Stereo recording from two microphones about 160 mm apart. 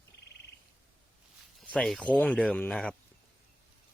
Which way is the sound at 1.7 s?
5° left (ahead or behind).